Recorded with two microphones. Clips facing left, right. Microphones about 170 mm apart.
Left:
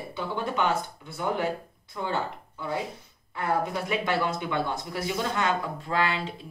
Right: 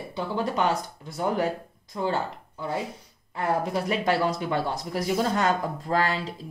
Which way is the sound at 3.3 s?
35° right (ahead or behind).